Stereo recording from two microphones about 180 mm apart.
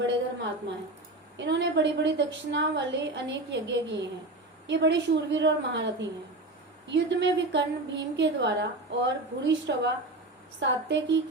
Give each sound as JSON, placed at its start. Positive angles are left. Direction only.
{"t": 1.4, "sound": "a woman's voice", "side_deg": -75}